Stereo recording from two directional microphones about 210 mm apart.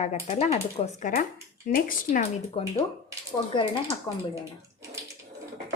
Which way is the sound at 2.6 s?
25° left (ahead or behind).